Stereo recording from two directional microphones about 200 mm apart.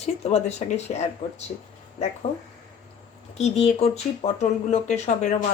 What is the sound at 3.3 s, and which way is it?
Speech, 30° left (ahead or behind).